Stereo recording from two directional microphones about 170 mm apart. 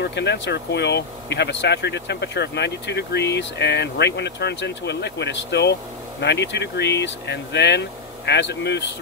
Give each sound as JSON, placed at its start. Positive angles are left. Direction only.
{"t": 0.0, "sound": "speech", "side_deg": 90}